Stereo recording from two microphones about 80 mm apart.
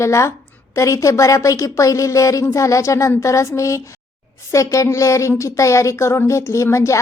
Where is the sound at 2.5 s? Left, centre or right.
Left.